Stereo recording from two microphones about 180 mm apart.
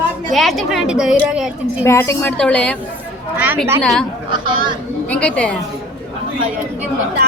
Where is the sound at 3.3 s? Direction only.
10° right (ahead or behind).